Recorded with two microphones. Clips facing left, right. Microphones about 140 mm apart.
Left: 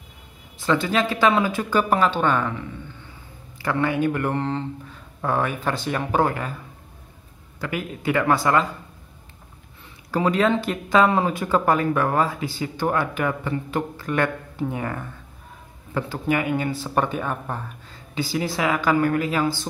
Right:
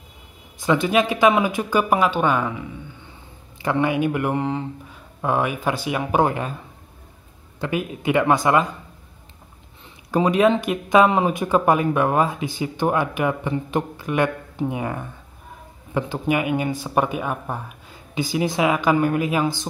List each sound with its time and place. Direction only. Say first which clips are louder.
0.6 s speech: right 3 dB; 15° right (ahead or behind)
3.6 s speech: right 2 dB; 20° right (ahead or behind)
7.6 s speech: right 3 dB; 20° right (ahead or behind)
10.1 s speech: right 3 dB; 15° right (ahead or behind)